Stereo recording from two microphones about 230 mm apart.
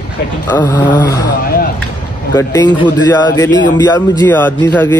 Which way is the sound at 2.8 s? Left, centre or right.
Centre.